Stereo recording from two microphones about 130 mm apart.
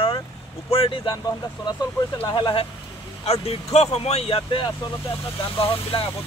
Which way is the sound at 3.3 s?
50° left (ahead or behind).